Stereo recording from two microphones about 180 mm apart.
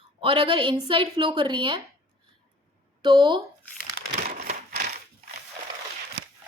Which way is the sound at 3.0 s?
25° right (ahead or behind).